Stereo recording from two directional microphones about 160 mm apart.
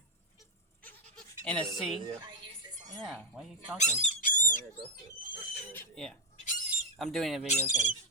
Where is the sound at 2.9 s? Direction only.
Centre (ahead or behind).